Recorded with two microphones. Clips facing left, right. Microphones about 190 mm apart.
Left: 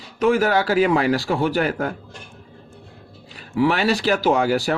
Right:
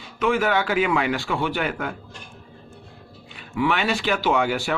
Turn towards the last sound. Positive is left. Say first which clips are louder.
# left 3 dB
turn(degrees=40)  # may be behind; listen again after turning